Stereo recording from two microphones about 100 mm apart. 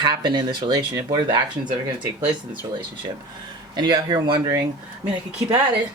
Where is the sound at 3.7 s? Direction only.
45° right (ahead or behind).